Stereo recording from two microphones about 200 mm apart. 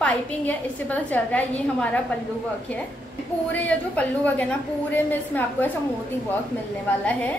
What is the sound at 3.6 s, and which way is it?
A woman's voice, 5° left (ahead or behind).